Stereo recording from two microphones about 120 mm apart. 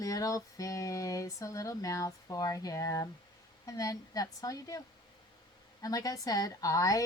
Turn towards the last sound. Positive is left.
turn(degrees=30)  # may be behind; listen again after turning